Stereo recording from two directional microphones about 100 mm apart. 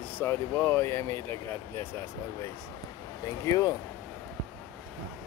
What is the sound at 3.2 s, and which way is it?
Speech, 35° left (ahead or behind).